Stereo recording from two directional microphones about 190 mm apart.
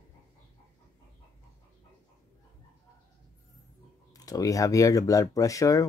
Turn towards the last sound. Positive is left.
turn(degrees=15)  # may be behind; listen again after turning